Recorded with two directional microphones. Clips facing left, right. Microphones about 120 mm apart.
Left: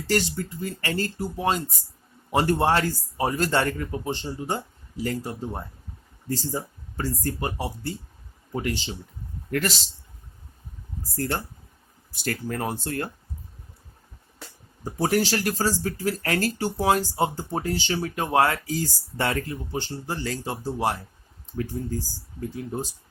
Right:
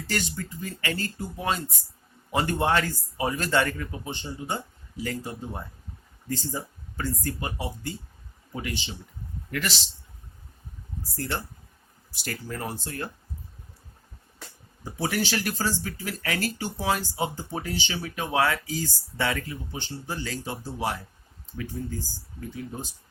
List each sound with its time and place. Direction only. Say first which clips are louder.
0.1 s speech: left 6 dB; 35° left (ahead or behind)
6.9 s speech: left 2 dB; 35° left (ahead or behind)
11.1 s speech: left 4 dB; 45° left (ahead or behind)
12.2 s speech: left 5 dB; 55° left (ahead or behind)
14.8 s speech: left 5 dB; 40° left (ahead or behind)